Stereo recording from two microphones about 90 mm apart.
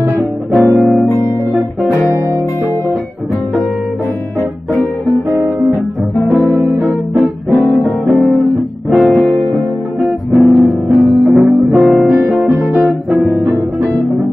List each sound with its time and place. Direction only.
0.6 s music: centre (ahead or behind)
5.3 s guitar: 25° right (ahead or behind)
6.1 s music: centre (ahead or behind)
6.5 s music: 20° right (ahead or behind)
7.5 s music: centre (ahead or behind)